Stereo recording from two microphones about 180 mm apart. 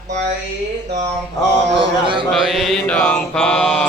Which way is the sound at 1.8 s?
30° right (ahead or behind).